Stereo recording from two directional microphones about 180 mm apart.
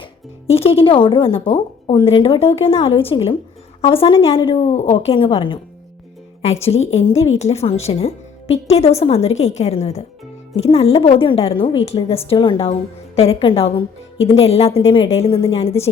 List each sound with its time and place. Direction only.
0.0 s a woman's voice: 35° left (ahead or behind)